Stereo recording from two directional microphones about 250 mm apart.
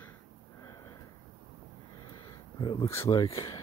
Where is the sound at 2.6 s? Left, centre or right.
Centre.